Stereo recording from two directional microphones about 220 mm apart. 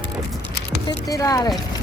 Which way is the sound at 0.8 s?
15° left (ahead or behind).